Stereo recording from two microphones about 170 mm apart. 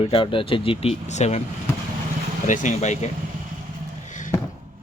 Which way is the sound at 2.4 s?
50° left (ahead or behind).